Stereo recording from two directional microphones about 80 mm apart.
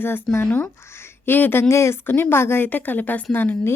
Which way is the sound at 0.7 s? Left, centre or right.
Left.